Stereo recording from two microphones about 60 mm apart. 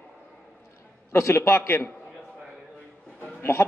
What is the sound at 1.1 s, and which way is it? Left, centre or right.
Speech, left.